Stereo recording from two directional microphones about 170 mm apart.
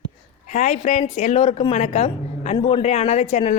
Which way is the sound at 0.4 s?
45° left (ahead or behind).